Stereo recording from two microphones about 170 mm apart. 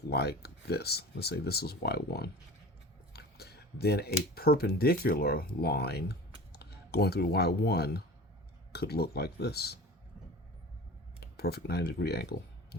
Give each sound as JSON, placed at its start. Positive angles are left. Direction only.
{"t": 0.1, "sound": "speech", "side_deg": 70}
{"t": 11.2, "sound": "speech", "side_deg": 70}